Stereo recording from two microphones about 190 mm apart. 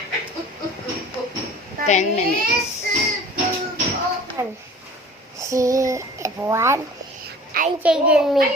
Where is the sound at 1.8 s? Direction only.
40° left (ahead or behind).